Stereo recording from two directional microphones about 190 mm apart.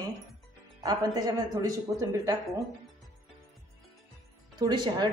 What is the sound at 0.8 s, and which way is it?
A man's voice, 20° right (ahead or behind).